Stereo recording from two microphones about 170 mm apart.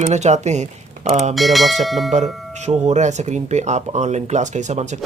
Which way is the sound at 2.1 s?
40° right (ahead or behind).